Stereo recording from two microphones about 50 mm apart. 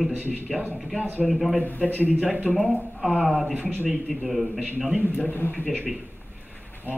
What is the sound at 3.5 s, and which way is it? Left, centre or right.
Speech, right.